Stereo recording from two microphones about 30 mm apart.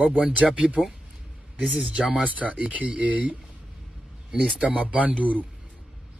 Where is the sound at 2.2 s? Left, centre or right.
Right.